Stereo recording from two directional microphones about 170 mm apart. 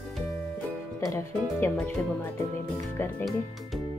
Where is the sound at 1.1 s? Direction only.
15° left (ahead or behind).